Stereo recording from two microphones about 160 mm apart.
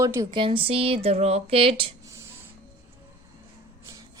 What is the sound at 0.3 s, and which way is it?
Speech, 35° right (ahead or behind).